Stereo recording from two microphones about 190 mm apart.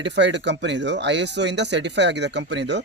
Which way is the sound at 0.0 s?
70° right (ahead or behind).